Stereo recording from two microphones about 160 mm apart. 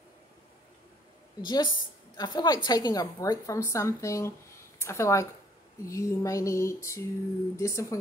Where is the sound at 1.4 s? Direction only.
25° left (ahead or behind).